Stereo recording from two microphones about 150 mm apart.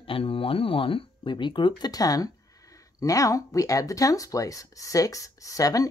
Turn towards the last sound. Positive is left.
turn(degrees=25)  # may be behind; listen again after turning